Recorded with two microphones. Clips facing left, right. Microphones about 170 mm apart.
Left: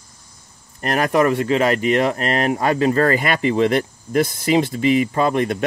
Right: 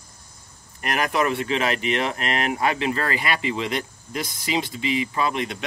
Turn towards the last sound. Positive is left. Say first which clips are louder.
# left 7 dB
turn(degrees=50)  # may be behind; listen again after turning